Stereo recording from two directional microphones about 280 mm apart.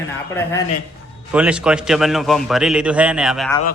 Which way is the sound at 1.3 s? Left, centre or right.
Centre.